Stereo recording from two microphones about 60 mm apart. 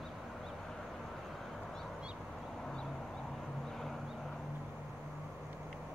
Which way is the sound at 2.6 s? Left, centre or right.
Centre.